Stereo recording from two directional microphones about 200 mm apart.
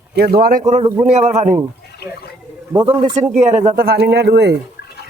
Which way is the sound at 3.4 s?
35° right (ahead or behind).